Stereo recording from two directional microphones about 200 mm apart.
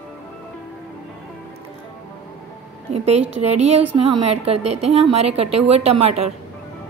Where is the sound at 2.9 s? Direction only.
30° right (ahead or behind).